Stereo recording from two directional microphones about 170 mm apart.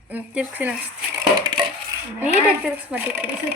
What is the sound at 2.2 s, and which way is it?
A woman's voice, 5° right (ahead or behind).